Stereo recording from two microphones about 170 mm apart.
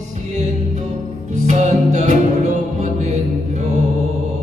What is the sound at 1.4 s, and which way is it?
Music, 45° right (ahead or behind).